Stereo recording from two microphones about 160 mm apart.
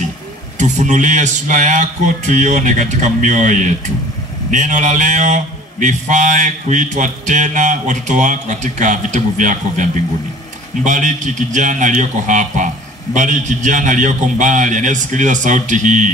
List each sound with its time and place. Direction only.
0.6 s a man's voice: 50° right (ahead or behind)